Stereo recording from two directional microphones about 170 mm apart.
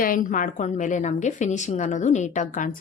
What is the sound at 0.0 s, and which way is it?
A woman's voice, 50° left (ahead or behind).